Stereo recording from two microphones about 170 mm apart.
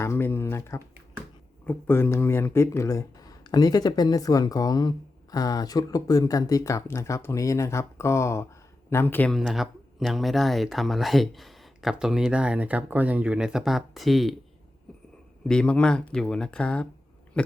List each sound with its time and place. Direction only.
0.0 s speech: 15° left (ahead or behind)
15.4 s speech: 5° left (ahead or behind)